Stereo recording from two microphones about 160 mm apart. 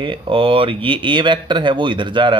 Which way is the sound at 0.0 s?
30° right (ahead or behind).